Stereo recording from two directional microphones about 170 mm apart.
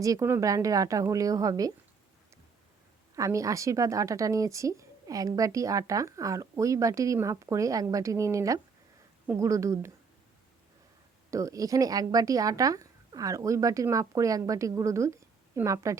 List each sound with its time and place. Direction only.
0.0 s speech: 20° right (ahead or behind)
3.2 s speech: 20° right (ahead or behind)
11.3 s speech: 20° right (ahead or behind)